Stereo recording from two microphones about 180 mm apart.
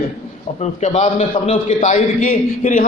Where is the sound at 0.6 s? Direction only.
40° left (ahead or behind).